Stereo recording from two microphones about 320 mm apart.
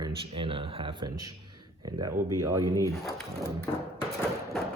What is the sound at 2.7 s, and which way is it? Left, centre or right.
Speech, centre.